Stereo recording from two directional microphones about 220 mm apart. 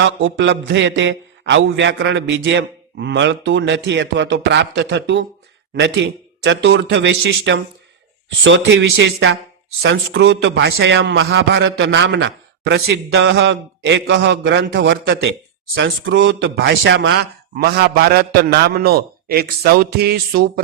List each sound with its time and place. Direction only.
0.0 s a man's voice: 60° right (ahead or behind)